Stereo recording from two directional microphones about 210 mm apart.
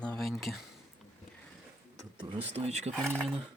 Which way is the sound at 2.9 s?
5° left (ahead or behind).